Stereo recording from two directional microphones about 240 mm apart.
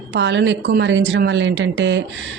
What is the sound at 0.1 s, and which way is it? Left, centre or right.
A woman's voice, right.